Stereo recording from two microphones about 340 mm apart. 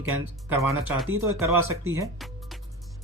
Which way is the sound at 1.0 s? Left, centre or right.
Right.